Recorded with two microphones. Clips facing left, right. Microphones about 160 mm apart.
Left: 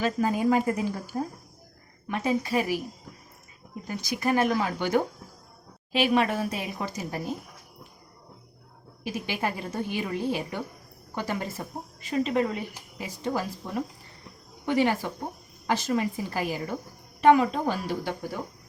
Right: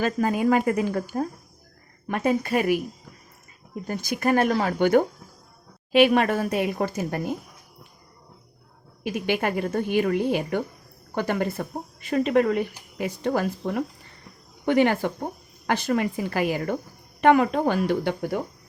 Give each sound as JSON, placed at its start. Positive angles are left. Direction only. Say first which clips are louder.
{"t": 0.0, "sound": "a woman's voice", "louder": "right 2 dB", "side_deg": -65}
{"t": 3.8, "sound": "speech", "louder": "right 4 dB", "side_deg": -50}
{"t": 9.0, "sound": "speech", "louder": "right 5 dB", "side_deg": -60}